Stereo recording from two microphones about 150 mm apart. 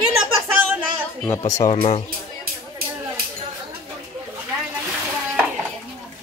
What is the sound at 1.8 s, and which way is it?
Speech, 45° left (ahead or behind).